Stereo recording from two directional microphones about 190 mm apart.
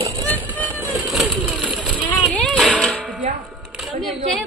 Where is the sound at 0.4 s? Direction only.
10° right (ahead or behind).